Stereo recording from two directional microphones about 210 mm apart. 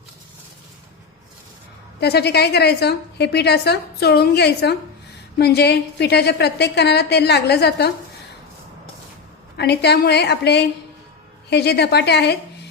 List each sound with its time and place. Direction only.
2.0 s a woman's voice: 50° left (ahead or behind)
9.6 s a woman's voice: 50° left (ahead or behind)